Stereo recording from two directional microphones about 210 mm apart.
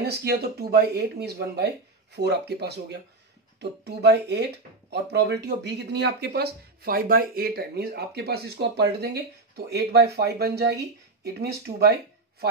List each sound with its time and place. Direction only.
0.0 s speech: 50° right (ahead or behind)